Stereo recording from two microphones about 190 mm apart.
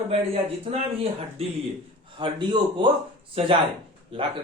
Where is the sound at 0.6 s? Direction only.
30° right (ahead or behind).